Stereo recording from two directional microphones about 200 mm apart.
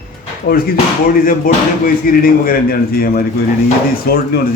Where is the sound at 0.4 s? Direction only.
50° left (ahead or behind).